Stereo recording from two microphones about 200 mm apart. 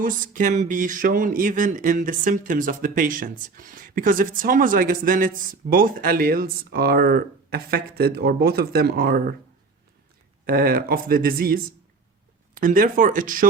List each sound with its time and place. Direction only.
0.0 s speech: 40° right (ahead or behind)
10.4 s speech: 50° right (ahead or behind)